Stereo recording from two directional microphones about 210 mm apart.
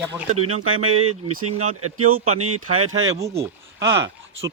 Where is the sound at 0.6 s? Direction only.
85° right.